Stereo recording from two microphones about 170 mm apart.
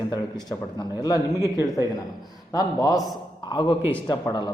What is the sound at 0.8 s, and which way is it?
Speech, 20° left (ahead or behind).